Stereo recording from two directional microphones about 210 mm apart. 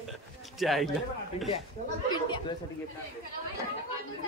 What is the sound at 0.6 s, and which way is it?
Speech, centre (ahead or behind).